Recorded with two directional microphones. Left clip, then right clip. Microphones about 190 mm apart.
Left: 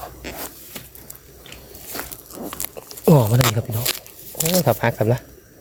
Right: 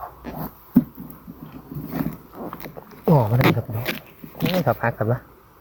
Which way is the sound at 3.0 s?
15° left (ahead or behind).